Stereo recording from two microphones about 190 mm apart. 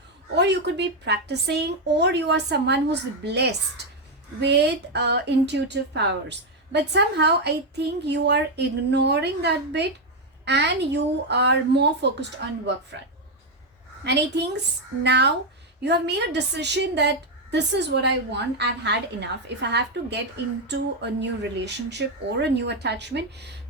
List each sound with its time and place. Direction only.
0.3 s a woman's voice: 65° right (ahead or behind)
14.0 s a woman's voice: 65° right (ahead or behind)